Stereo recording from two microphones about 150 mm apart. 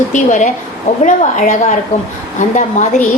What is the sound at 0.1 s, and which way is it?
A woman's voice, 55° left (ahead or behind).